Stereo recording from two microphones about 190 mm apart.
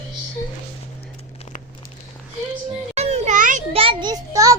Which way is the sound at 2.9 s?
35° right (ahead or behind).